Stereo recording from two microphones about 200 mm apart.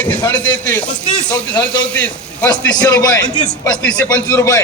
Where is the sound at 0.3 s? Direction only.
20° left (ahead or behind).